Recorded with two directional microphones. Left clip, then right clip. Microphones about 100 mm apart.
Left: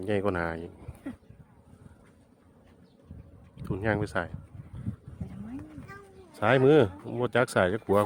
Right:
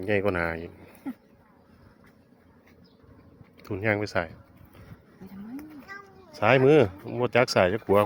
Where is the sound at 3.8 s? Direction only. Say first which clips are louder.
Right 3 dB; 10° left (ahead or behind).